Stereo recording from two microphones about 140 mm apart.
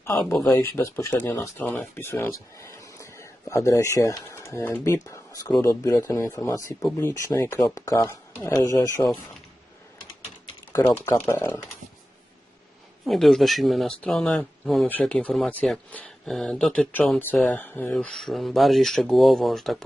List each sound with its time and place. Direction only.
0.0 s speech: 15° left (ahead or behind)
10.7 s speech: 20° left (ahead or behind)
13.1 s speech: centre (ahead or behind)